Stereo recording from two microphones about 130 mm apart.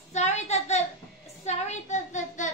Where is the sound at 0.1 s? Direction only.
60° left (ahead or behind).